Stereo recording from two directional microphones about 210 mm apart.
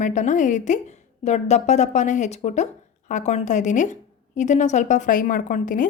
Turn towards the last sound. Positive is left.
turn(degrees=40)  # may be behind; listen again after turning